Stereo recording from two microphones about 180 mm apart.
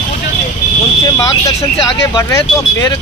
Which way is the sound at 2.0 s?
15° left (ahead or behind).